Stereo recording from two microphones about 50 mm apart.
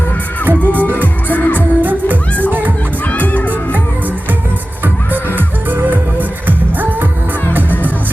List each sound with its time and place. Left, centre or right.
0.4 s music: right
1.0 s music: left
1.5 s music: right
3.1 s music: left
5.7 s music: right